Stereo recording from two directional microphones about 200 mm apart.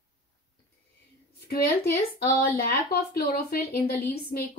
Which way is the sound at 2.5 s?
50° left (ahead or behind).